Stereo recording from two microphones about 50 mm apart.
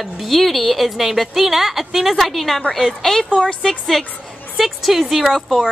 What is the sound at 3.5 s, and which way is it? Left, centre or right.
Speech, centre.